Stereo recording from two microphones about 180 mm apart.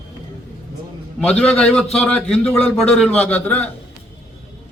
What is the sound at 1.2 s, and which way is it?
A man's voice, 5° left (ahead or behind).